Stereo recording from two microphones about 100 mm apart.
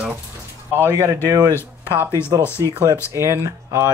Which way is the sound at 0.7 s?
25° right (ahead or behind).